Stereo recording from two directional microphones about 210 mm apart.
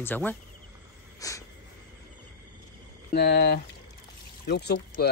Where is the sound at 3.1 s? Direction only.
50° left (ahead or behind).